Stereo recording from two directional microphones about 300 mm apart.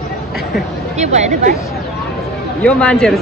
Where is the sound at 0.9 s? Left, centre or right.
Right.